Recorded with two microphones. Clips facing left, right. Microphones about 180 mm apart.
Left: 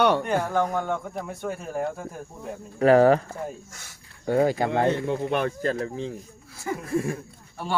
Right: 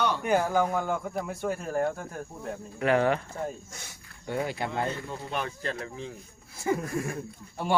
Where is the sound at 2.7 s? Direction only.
40° left (ahead or behind).